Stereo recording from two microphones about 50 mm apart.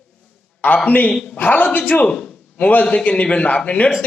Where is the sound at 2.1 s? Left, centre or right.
Centre.